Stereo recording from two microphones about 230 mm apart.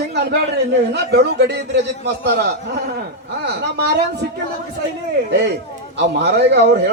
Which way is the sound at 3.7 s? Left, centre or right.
Right.